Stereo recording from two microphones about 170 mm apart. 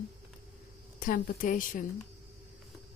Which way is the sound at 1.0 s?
50° left (ahead or behind).